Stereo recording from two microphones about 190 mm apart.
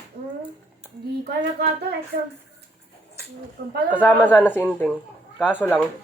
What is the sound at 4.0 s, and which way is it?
Speech, 10° left (ahead or behind).